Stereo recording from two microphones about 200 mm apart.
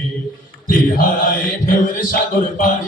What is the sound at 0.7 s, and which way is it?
A man's voice, 45° left (ahead or behind).